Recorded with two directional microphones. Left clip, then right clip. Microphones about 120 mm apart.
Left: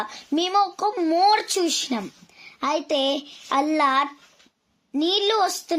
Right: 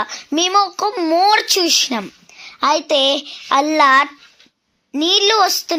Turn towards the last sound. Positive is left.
turn(degrees=-30)  # may be behind; listen again after turning